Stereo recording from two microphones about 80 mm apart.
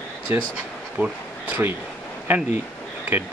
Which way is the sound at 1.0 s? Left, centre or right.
Centre.